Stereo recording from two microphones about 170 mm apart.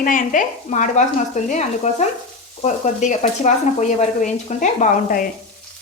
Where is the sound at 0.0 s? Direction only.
50° left (ahead or behind).